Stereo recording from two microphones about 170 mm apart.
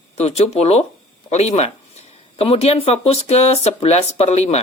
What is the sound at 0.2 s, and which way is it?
A woman's voice, 40° left (ahead or behind).